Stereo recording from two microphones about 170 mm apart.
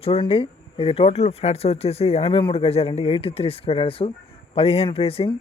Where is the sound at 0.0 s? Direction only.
35° left (ahead or behind).